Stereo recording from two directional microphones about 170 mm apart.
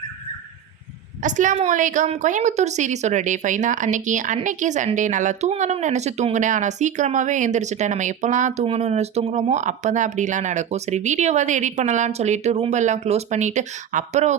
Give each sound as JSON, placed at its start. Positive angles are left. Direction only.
{"t": 1.2, "sound": "speech", "side_deg": -50}